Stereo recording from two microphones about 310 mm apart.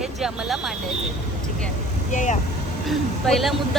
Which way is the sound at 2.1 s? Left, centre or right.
Left.